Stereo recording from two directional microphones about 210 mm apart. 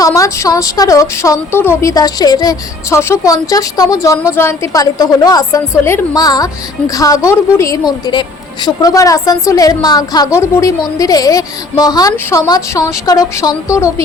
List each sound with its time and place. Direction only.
0.0 s a woman's voice: 15° left (ahead or behind)